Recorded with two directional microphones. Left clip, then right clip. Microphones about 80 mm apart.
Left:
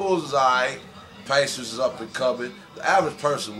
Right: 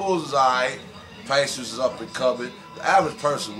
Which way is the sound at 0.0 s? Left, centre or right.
Centre.